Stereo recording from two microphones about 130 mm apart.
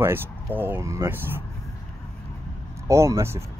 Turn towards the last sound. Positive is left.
turn(degrees=-20)  # may be behind; listen again after turning